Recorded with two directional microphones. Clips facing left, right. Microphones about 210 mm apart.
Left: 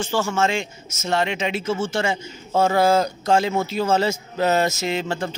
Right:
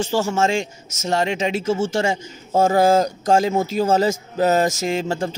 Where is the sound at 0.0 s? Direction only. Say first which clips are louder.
Right 2 dB; 40° right (ahead or behind).